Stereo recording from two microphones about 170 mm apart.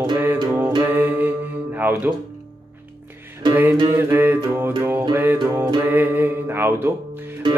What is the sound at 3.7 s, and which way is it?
Music, 25° right (ahead or behind).